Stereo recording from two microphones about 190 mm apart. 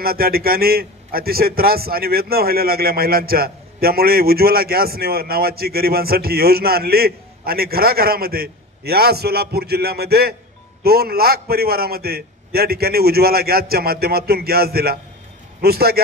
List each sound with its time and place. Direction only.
0.0 s a man's voice: 50° right (ahead or behind)